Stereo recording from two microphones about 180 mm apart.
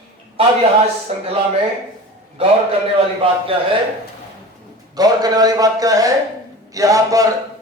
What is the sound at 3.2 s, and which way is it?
Speech, 30° right (ahead or behind).